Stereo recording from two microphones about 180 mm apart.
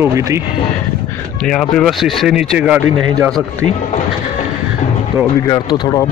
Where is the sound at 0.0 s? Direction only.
15° right (ahead or behind).